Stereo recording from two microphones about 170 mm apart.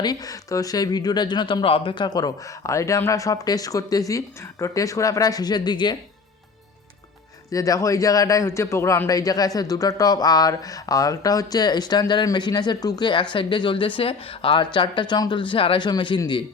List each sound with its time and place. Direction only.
0.0 s a man's voice: 20° left (ahead or behind)
7.5 s a man's voice: 20° left (ahead or behind)